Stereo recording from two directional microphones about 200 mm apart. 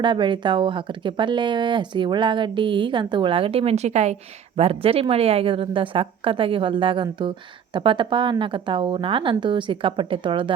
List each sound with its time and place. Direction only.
0.0 s speech: 20° right (ahead or behind)